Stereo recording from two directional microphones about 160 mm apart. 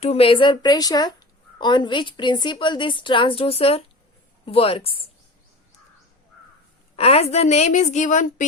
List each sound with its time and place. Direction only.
0.0 s a woman's voice: 40° left (ahead or behind)
6.9 s a woman's voice: 40° left (ahead or behind)